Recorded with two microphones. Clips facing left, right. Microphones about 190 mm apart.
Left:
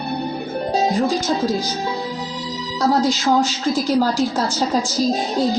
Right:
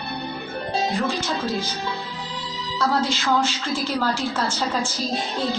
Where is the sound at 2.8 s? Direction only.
40° left (ahead or behind).